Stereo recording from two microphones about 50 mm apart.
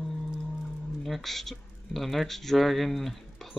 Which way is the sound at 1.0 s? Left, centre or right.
Centre.